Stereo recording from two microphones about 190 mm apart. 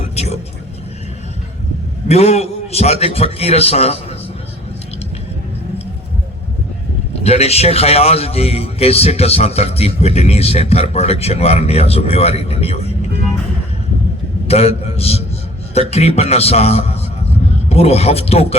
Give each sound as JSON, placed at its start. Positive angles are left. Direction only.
{"t": 0.0, "sound": "vehicle", "side_deg": 35}
{"t": 2.0, "sound": "a man's voice", "side_deg": 35}
{"t": 7.2, "sound": "a man's voice", "side_deg": 35}
{"t": 14.4, "sound": "a man's voice", "side_deg": 30}